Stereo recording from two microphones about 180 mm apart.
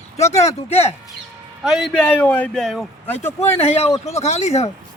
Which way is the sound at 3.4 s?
35° left (ahead or behind).